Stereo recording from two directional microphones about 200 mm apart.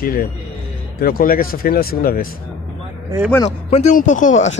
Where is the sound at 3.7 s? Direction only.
40° left (ahead or behind).